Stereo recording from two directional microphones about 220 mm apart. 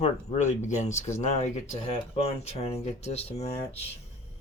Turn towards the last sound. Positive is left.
turn(degrees=30)  # may be behind; listen again after turning